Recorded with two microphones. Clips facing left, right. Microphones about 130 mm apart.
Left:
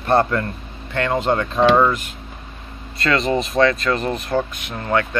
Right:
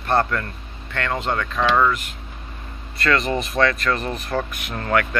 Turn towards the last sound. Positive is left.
turn(degrees=20)  # may be behind; listen again after turning